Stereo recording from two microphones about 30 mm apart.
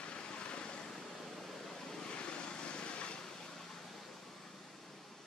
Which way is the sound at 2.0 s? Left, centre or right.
Left.